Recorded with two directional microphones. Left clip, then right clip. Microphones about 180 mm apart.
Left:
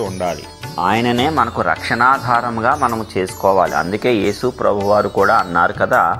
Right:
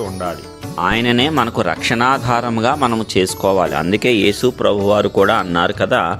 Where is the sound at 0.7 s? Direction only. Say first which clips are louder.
Even; 20° right (ahead or behind).